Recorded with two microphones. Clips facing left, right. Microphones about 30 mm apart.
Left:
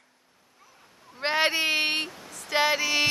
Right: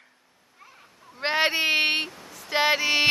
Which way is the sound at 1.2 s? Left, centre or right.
Centre.